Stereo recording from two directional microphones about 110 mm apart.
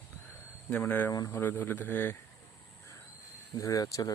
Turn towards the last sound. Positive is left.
turn(degrees=35)  # may be behind; listen again after turning